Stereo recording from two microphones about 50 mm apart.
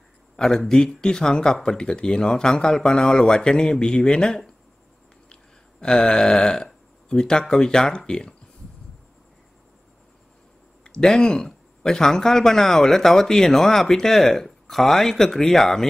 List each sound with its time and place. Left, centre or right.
0.4 s speech: centre
10.8 s speech: centre